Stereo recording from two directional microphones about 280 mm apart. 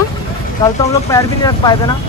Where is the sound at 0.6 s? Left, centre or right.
Centre.